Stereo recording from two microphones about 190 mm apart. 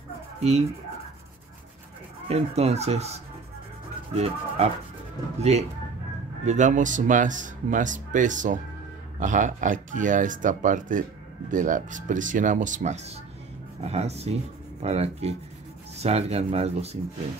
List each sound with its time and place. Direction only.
0.4 s speech: 35° right (ahead or behind)
2.2 s speech: 35° right (ahead or behind)